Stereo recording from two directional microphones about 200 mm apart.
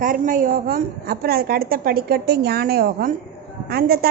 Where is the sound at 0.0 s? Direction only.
45° right (ahead or behind).